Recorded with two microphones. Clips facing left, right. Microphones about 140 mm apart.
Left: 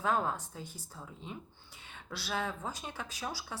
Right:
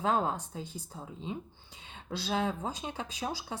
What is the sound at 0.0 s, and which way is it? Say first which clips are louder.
A woman's voice: right 2 dB; 20° right (ahead or behind).